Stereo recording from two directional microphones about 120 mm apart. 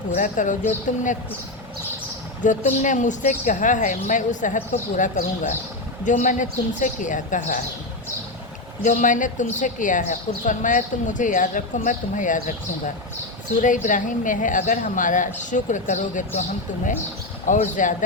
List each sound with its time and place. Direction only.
0.1 s speech: 90° left
2.4 s speech: 90° left
8.8 s speech: 90° left
13.6 s speech: 90° left
17.4 s speech: 90° left